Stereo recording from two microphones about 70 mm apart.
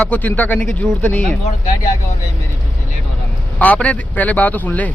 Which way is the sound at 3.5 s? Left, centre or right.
Left.